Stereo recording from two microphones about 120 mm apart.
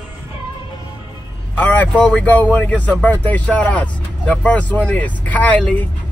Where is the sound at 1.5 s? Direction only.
15° left (ahead or behind).